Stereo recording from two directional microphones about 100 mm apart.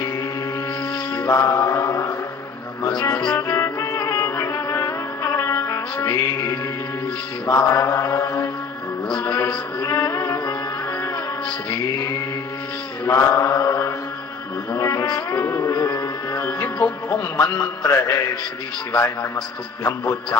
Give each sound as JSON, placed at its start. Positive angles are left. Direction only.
{"t": 1.3, "sound": "mantra", "side_deg": 30}
{"t": 2.8, "sound": "music", "side_deg": 45}
{"t": 7.4, "sound": "mantra", "side_deg": 30}
{"t": 9.1, "sound": "music", "side_deg": 40}
{"t": 13.1, "sound": "mantra", "side_deg": 30}
{"t": 14.7, "sound": "music", "side_deg": 30}
{"t": 15.7, "sound": "speech", "side_deg": 35}
{"t": 17.4, "sound": "music", "side_deg": 40}
{"t": 18.9, "sound": "mantra", "side_deg": 30}